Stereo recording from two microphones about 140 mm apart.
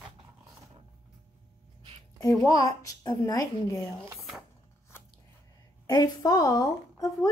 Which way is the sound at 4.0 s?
20° right (ahead or behind).